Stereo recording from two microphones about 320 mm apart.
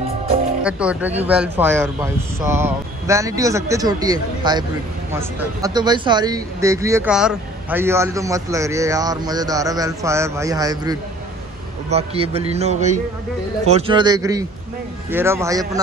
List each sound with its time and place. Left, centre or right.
0.7 s a man's voice: centre